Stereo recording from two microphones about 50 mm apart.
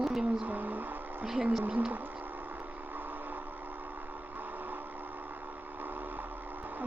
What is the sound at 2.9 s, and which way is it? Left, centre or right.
Vehicle, right.